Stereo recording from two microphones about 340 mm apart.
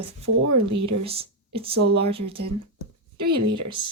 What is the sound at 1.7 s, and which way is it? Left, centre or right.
Speech, right.